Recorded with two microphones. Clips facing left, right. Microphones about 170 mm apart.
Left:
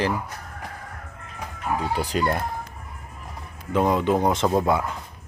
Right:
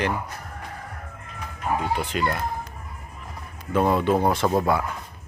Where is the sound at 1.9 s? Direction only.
35° left (ahead or behind).